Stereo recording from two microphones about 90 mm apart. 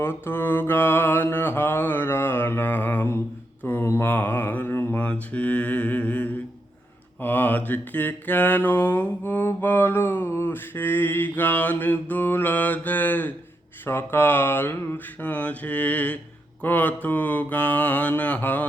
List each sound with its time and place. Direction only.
0.0 s mantra: 25° left (ahead or behind)